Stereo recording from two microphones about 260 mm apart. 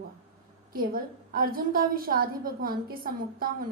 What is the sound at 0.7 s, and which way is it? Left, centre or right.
A woman's voice, right.